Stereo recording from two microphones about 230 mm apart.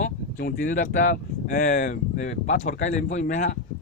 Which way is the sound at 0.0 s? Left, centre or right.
Left.